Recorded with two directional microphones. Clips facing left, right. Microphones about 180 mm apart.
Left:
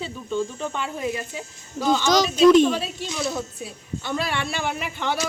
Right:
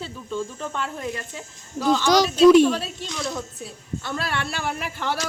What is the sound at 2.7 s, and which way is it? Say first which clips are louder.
Speech: even; 5° left (ahead or behind).